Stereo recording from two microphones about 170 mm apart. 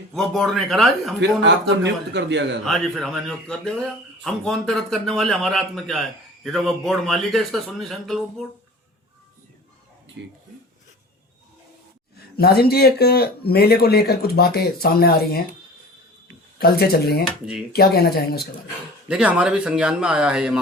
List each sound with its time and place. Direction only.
0.1 s speech: centre (ahead or behind)
1.2 s a man's voice: 90° right
2.6 s speech: centre (ahead or behind)
12.1 s speech: 65° left (ahead or behind)
16.6 s speech: 65° left (ahead or behind)
19.0 s speech: 5° right (ahead or behind)